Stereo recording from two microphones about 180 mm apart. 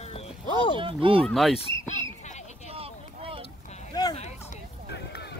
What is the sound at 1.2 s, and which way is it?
Speech, centre (ahead or behind).